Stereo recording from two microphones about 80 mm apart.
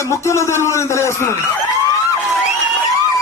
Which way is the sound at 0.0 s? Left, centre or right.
Left.